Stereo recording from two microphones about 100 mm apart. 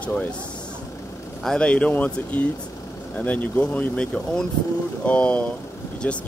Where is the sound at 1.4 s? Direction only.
5° left (ahead or behind).